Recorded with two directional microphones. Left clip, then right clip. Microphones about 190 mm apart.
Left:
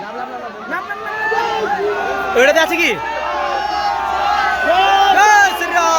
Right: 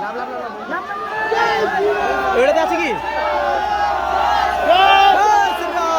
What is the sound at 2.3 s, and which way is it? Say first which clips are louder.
Speech: left 5 dB; 25° left (ahead or behind).